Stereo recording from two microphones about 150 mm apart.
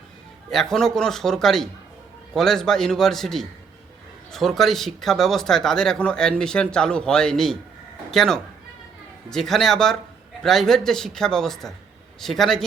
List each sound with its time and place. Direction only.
0.5 s speech: centre (ahead or behind)